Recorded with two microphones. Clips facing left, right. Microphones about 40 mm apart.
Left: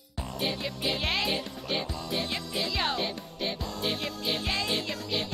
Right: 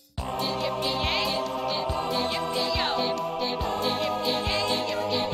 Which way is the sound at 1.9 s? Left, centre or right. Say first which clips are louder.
Right 6 dB; right.